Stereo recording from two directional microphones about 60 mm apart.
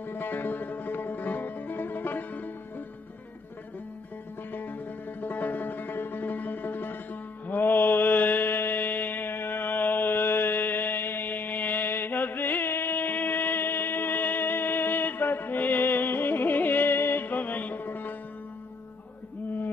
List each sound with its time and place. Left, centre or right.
0.0 s music: left
4.5 s music: left
7.4 s mantra: left